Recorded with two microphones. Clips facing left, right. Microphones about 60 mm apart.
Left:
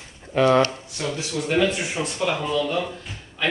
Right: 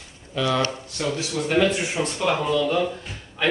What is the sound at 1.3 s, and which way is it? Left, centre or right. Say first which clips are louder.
Speech: right 1 dB; centre.